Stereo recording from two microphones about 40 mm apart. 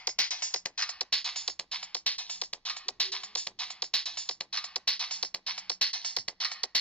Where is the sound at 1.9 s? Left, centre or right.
Left.